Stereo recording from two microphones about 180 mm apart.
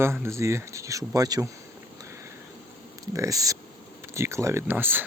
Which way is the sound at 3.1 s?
20° right (ahead or behind).